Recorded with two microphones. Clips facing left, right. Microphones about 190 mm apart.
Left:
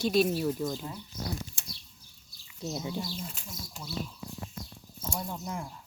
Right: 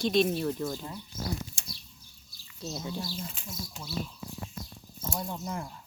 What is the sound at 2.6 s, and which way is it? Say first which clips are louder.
Speech: left 2 dB; 15° left (ahead or behind).